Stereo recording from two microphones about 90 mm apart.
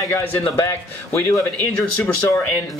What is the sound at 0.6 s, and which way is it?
Speech, 30° left (ahead or behind).